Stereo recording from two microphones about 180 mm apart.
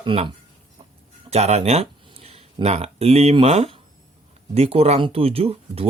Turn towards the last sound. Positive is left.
turn(degrees=-35)  # may be behind; listen again after turning